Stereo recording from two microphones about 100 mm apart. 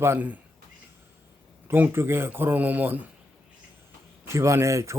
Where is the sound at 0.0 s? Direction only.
20° right (ahead or behind).